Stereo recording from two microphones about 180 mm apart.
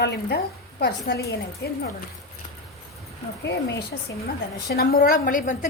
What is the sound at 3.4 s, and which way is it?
A woman's voice, 65° left (ahead or behind).